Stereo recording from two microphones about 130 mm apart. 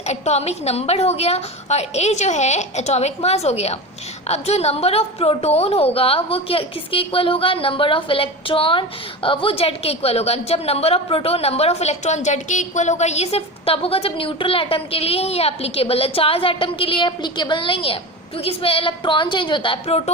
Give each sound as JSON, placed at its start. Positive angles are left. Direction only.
{"t": 0.0, "sound": "a woman's voice", "side_deg": 60}